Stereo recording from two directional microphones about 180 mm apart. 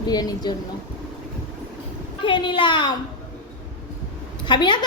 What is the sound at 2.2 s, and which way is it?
Speech, 25° left (ahead or behind).